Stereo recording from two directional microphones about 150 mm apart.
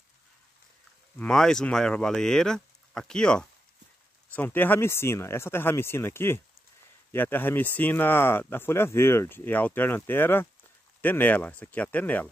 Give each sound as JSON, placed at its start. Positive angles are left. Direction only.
{"t": 1.1, "sound": "speech", "side_deg": 5}